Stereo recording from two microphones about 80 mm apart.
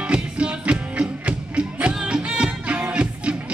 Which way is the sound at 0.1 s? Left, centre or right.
Centre.